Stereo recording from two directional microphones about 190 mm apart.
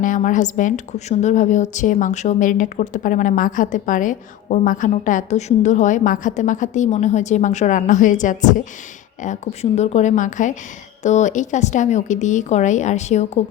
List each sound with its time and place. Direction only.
0.0 s a woman's voice: 45° left (ahead or behind)